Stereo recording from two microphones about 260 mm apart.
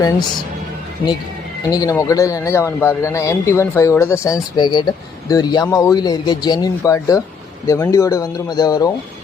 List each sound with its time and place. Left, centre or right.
0.0 s a man's voice: centre
1.7 s a man's voice: centre